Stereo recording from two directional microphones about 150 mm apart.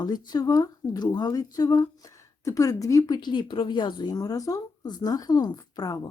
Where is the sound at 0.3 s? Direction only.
25° left (ahead or behind).